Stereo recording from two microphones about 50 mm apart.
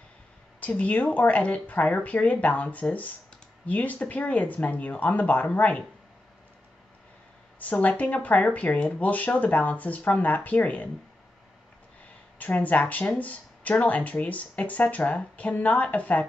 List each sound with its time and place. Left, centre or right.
0.6 s speech: left
7.5 s speech: left
12.4 s speech: left